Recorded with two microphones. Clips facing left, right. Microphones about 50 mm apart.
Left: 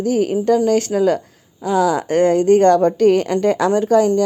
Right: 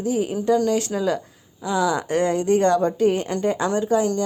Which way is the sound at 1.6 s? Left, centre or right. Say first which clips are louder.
Left 5 dB; left.